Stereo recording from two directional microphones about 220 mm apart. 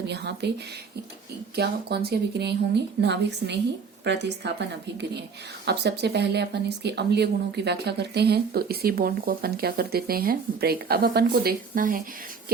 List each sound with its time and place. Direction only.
0.1 s speech: 50° right (ahead or behind)
1.5 s speech: 45° right (ahead or behind)
5.6 s speech: 50° right (ahead or behind)